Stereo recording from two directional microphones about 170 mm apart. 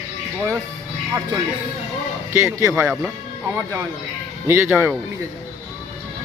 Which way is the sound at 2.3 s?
15° right (ahead or behind).